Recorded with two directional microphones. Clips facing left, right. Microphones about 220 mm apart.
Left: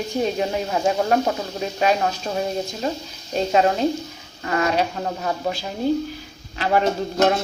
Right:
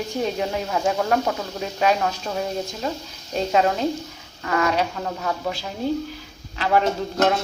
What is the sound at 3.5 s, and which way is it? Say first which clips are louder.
Speech: left 2 dB; 30° left (ahead or behind).